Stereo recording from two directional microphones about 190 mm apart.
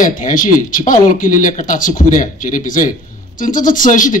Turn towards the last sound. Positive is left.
turn(degrees=45)  # may be behind; listen again after turning